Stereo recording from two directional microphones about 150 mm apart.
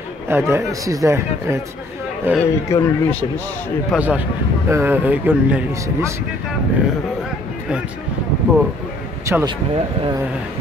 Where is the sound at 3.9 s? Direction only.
10° right (ahead or behind).